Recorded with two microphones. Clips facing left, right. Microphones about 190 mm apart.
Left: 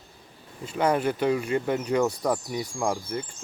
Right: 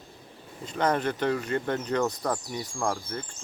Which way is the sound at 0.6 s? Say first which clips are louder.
Left 2 dB; 10° left (ahead or behind).